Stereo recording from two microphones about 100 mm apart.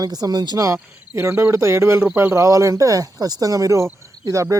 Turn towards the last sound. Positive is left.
turn(degrees=-30)  # may be behind; listen again after turning